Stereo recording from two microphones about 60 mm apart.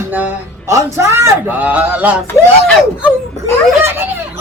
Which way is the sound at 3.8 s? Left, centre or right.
Right.